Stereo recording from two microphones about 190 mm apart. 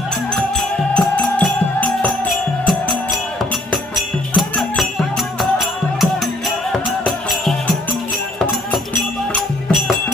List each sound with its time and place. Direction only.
0.9 s music: 5° left (ahead or behind)
3.7 s music: centre (ahead or behind)
6.7 s music: centre (ahead or behind)
9.3 s music: centre (ahead or behind)